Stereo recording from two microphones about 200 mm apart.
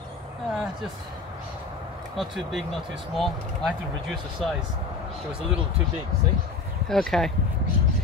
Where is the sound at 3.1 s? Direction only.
Centre (ahead or behind).